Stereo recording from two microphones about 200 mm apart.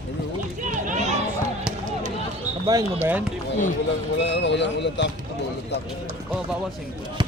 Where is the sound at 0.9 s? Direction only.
35° right (ahead or behind).